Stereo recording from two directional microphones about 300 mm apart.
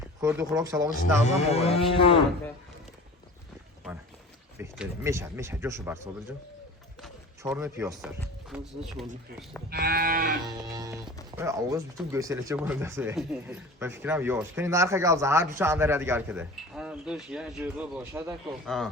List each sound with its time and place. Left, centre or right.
0.2 s speech: centre
1.2 s cattle: left
4.5 s speech: centre
7.0 s speech: centre
9.6 s moo: right
10.4 s speech: centre